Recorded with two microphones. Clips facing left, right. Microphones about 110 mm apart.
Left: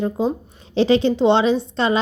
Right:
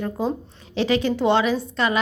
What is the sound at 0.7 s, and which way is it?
A woman's voice, 30° left (ahead or behind).